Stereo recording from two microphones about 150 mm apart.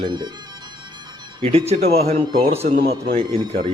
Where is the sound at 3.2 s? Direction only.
30° right (ahead or behind).